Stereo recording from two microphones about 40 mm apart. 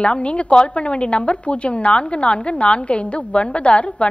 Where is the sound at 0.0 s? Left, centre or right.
Left.